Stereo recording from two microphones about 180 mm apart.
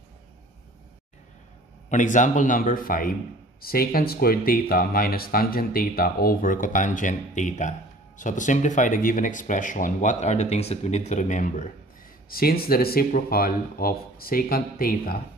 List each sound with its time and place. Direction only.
1.9 s speech: 45° left (ahead or behind)
12.3 s speech: 55° left (ahead or behind)